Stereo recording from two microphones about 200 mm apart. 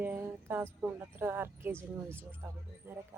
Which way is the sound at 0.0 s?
10° right (ahead or behind).